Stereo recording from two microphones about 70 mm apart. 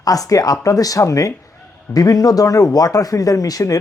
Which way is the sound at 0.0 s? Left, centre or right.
Left.